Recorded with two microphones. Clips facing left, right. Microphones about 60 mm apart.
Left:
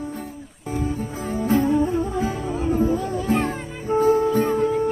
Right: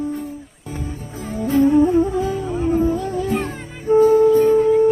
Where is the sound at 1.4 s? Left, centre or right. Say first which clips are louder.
Right 4 dB; left.